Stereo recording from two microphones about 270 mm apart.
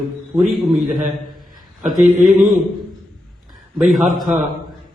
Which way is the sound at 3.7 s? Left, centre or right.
Centre.